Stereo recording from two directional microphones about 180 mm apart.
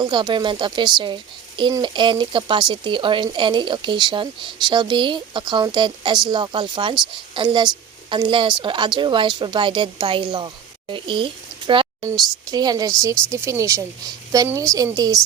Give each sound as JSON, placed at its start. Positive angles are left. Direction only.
{"t": 0.0, "sound": "a woman's voice", "side_deg": -25}